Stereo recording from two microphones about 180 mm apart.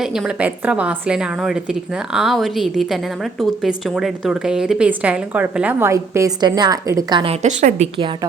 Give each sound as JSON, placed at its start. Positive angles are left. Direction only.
{"t": 0.0, "sound": "a woman's voice", "side_deg": -5}
{"t": 7.4, "sound": "a woman's voice", "side_deg": -40}